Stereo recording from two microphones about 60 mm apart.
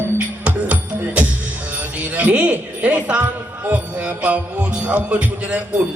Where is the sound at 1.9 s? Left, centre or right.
Right.